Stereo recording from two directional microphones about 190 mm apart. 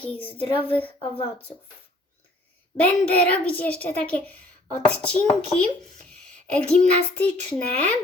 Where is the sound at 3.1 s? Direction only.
10° left (ahead or behind).